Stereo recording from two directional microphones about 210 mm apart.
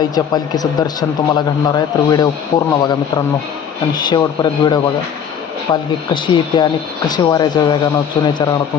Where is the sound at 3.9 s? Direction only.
20° left (ahead or behind).